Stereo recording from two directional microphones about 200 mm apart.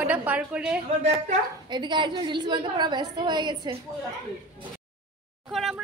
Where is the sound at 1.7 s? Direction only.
25° right (ahead or behind).